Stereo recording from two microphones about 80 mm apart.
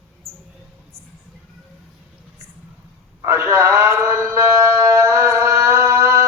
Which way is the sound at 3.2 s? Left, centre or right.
Right.